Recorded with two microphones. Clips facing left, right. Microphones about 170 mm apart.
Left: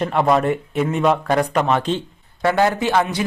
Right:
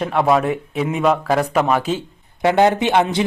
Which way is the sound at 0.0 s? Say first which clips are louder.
Even; centre (ahead or behind).